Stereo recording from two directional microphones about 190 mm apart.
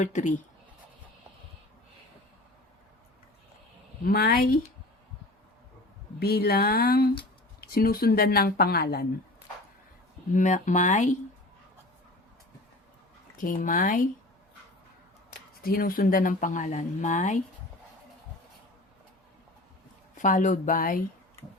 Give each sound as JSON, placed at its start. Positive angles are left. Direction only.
{"t": 0.0, "sound": "speech", "side_deg": 40}
{"t": 4.0, "sound": "speech", "side_deg": 50}
{"t": 6.1, "sound": "speech", "side_deg": 55}
{"t": 10.3, "sound": "speech", "side_deg": 40}
{"t": 13.4, "sound": "speech", "side_deg": 45}
{"t": 15.3, "sound": "speech", "side_deg": 50}
{"t": 20.1, "sound": "speech", "side_deg": 45}